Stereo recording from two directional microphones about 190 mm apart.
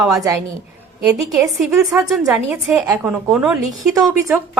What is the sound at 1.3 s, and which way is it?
A woman's voice, centre (ahead or behind).